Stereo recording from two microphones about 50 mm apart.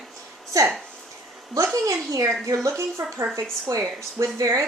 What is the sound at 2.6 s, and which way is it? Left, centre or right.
Speech, right.